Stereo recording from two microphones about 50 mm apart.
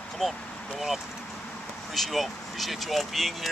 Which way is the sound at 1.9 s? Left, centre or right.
Centre.